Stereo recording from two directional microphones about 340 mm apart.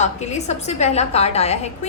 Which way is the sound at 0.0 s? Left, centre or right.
Centre.